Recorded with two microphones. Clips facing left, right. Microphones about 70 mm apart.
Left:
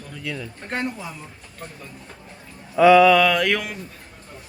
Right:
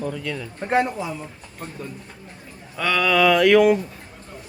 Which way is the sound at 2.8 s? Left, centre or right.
Centre.